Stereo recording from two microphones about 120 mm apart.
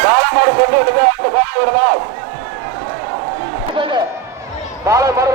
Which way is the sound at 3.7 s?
45° right (ahead or behind).